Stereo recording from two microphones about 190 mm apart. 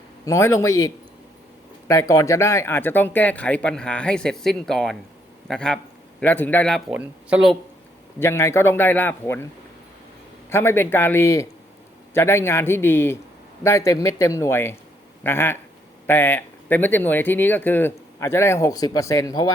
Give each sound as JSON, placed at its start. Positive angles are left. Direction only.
{"t": 0.3, "sound": "a man's voice", "side_deg": 15}
{"t": 8.2, "sound": "speech", "side_deg": 15}
{"t": 10.5, "sound": "speech", "side_deg": 15}